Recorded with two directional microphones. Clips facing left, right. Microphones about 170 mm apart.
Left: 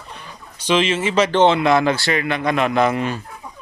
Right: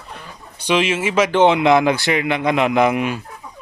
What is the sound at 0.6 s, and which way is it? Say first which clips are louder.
A man's voice: even; 10° right (ahead or behind).